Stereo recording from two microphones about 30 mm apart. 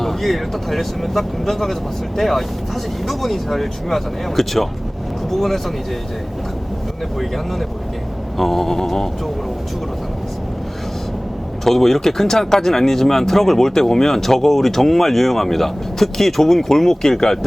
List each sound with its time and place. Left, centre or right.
0.0 s speech: centre
8.4 s speech: centre
11.6 s speech: centre